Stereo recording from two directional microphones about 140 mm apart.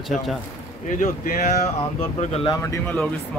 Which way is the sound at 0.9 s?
75° left (ahead or behind).